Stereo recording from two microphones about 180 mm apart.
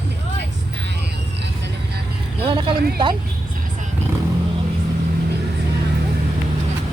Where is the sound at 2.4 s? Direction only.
30° right (ahead or behind).